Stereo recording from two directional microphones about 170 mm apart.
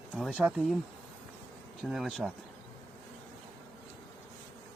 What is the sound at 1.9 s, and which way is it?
Speech, centre (ahead or behind).